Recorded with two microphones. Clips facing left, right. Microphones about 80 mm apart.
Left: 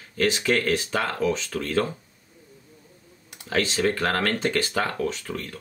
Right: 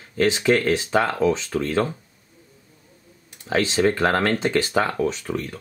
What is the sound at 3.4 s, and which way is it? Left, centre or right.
Speech, right.